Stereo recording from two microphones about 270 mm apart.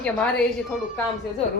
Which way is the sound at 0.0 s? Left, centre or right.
Centre.